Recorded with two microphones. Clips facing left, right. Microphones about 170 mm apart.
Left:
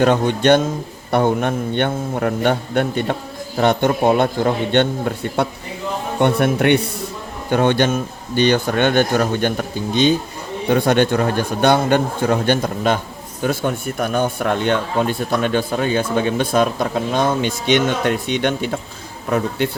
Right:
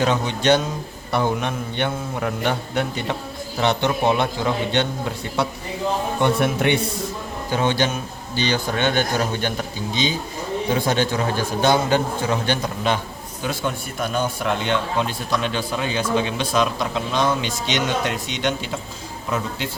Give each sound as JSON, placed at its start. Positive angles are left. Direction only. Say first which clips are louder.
{"t": 0.0, "sound": "a man's voice", "louder": "left 5 dB", "side_deg": 55}